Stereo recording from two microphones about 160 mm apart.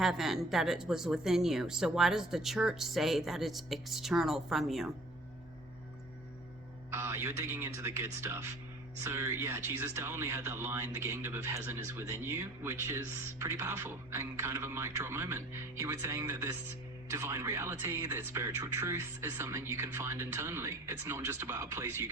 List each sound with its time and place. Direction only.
0.0 s speech: centre (ahead or behind)
6.9 s speech: 15° right (ahead or behind)